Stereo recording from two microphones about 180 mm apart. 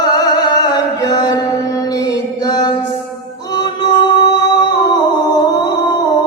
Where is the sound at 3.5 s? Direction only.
25° left (ahead or behind).